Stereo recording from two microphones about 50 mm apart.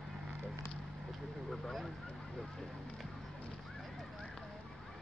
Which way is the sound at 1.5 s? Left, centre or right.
Centre.